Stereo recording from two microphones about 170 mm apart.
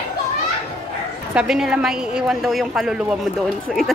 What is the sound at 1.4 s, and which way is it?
A woman's voice, 5° right (ahead or behind).